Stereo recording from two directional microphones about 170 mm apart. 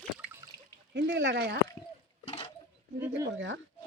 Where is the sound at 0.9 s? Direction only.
90° right.